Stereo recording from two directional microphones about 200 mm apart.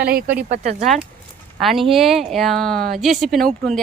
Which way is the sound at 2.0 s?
Centre (ahead or behind).